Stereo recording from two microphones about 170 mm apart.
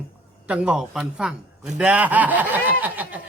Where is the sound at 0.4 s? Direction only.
5° right (ahead or behind).